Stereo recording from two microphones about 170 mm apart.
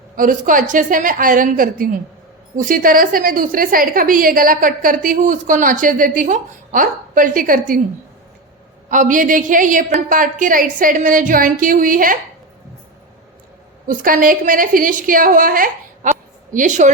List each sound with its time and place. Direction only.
0.2 s a woman's voice: 50° right (ahead or behind)
8.9 s a woman's voice: 50° right (ahead or behind)
13.8 s a woman's voice: 55° right (ahead or behind)